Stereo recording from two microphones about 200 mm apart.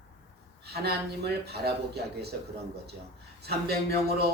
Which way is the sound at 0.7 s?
55° right (ahead or behind).